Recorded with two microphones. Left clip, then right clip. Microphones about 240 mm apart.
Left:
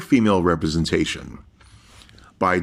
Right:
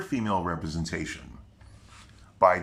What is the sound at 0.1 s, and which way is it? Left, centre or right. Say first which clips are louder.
Speech: left 12 dB; left.